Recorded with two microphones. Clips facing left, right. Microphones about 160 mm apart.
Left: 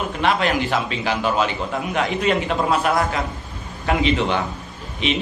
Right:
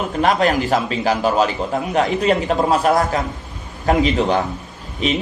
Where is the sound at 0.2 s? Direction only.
40° right (ahead or behind).